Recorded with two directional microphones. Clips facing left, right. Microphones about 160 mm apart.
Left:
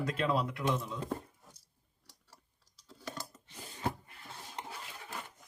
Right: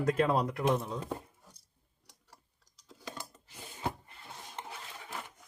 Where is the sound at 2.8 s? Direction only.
10° right (ahead or behind).